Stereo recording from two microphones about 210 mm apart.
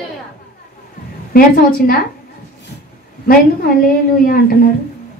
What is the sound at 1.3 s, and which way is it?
Speech, 45° left (ahead or behind).